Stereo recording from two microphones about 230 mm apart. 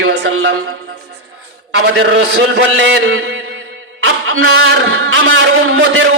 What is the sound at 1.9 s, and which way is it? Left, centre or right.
A man's voice, right.